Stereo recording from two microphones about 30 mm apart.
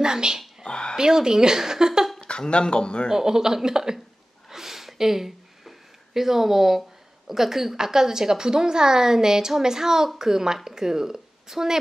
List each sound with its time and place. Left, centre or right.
0.0 s speech: right
0.7 s a sound: left
0.9 s speech: right
2.1 s speech: left
3.1 s speech: centre
4.5 s a sound: centre
7.2 s a woman's voice: centre